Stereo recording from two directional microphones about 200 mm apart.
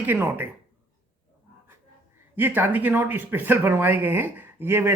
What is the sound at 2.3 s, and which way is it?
Speech, 10° right (ahead or behind).